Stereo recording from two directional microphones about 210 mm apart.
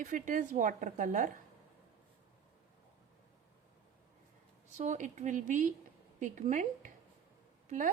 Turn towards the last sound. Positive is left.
turn(degrees=-40)  # may be behind; listen again after turning